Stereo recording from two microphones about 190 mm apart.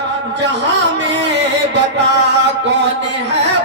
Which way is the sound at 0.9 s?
65° right (ahead or behind).